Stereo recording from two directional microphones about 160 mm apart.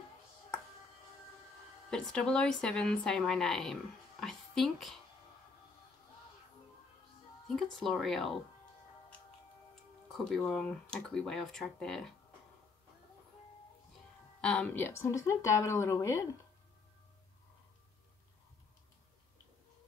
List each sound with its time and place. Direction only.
1.9 s a woman's voice: 5° left (ahead or behind)
7.4 s speech: 5° left (ahead or behind)
10.1 s speech: 5° left (ahead or behind)
14.4 s speech: 5° left (ahead or behind)